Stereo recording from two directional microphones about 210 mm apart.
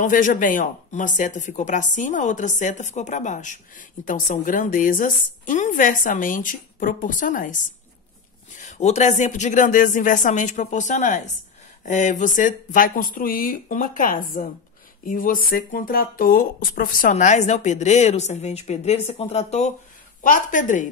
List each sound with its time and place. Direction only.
0.0 s speech: 40° left (ahead or behind)
8.5 s speech: 35° left (ahead or behind)